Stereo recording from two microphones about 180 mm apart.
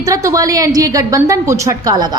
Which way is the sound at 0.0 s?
15° right (ahead or behind).